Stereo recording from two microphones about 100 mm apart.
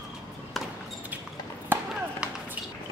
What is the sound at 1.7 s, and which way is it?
Chop, 20° right (ahead or behind).